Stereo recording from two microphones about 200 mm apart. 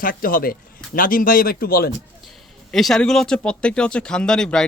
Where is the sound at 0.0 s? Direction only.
45° left (ahead or behind).